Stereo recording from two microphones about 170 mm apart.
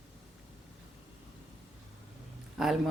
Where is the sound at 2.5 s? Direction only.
Centre (ahead or behind).